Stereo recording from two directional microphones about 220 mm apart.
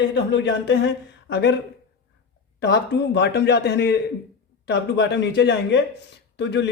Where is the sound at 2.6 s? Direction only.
50° left (ahead or behind).